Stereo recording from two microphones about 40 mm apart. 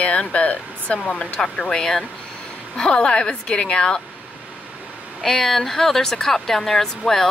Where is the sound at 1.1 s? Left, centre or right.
Left.